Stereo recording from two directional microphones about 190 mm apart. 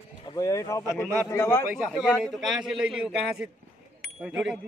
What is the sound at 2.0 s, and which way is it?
A man's voice, centre (ahead or behind).